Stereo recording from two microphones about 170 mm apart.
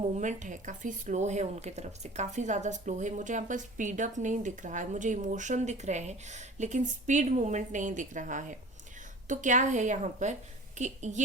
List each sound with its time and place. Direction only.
0.0 s a woman's voice: 45° right (ahead or behind)